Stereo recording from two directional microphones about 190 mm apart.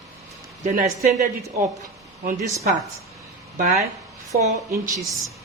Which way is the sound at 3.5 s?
40° right (ahead or behind).